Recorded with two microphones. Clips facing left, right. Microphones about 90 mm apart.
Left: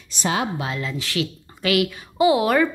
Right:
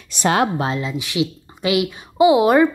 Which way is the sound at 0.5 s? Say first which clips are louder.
Right 6 dB; 30° right (ahead or behind).